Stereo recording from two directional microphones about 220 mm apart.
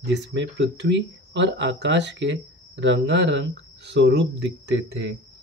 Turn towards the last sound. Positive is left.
turn(degrees=-55)  # may be behind; listen again after turning